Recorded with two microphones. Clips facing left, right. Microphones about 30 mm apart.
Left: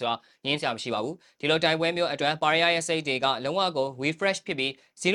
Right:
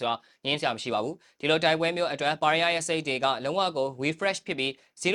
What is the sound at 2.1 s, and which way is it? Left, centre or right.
Speech, left.